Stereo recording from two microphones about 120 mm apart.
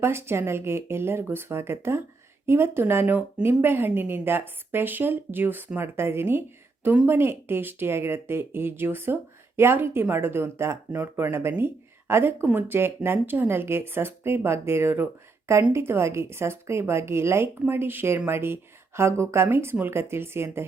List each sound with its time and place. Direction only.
0.0 s speech: 20° right (ahead or behind)